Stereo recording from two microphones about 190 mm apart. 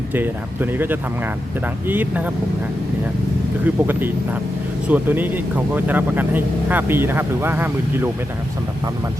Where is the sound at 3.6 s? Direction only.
10° right (ahead or behind).